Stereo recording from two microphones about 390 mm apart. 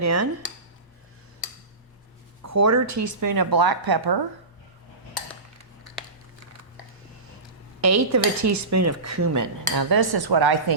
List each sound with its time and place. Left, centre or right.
0.0 s speech: right
2.4 s speech: right
7.8 s speech: right